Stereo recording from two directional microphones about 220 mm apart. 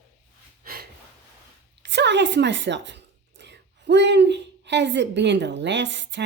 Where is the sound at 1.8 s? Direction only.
50° right (ahead or behind).